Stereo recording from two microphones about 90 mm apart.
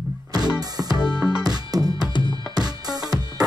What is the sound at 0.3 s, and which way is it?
Music, 50° right (ahead or behind).